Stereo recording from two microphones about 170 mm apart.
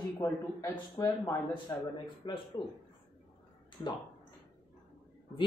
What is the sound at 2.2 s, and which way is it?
Throat clearing, 30° left (ahead or behind).